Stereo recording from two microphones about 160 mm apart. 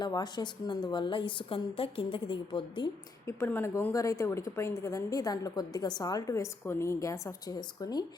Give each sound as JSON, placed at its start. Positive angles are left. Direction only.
{"t": 0.0, "sound": "a woman's voice", "side_deg": 25}
{"t": 3.2, "sound": "a woman's voice", "side_deg": 15}